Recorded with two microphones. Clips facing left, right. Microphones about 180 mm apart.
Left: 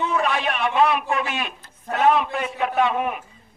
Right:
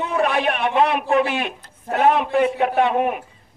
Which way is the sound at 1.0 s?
30° right (ahead or behind).